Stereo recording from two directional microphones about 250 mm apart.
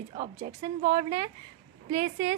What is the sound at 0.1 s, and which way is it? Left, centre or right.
A woman's voice, right.